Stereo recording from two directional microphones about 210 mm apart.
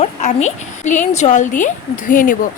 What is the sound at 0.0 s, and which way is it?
Speech, 35° left (ahead or behind).